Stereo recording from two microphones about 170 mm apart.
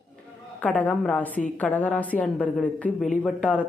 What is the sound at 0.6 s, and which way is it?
Speech, 10° left (ahead or behind).